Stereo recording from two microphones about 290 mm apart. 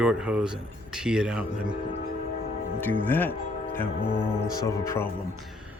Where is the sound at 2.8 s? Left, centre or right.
Centre.